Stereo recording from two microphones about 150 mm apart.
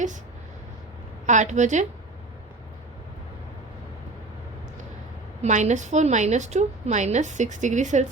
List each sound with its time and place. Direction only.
1.3 s a woman's voice: 55° right (ahead or behind)
5.4 s a woman's voice: 50° right (ahead or behind)